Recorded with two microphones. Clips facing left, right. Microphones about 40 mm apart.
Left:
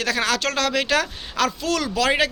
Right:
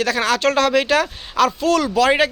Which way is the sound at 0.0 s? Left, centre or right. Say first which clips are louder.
Right 4 dB; centre.